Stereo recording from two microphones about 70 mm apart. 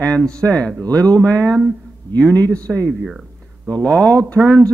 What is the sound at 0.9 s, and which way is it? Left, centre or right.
Speech, right.